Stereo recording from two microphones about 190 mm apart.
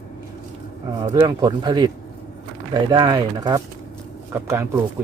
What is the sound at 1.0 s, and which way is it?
Speech, 20° right (ahead or behind).